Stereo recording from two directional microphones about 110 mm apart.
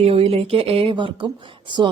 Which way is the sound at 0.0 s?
65° right (ahead or behind).